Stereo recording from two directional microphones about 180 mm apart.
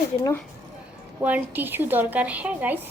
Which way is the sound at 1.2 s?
10° right (ahead or behind).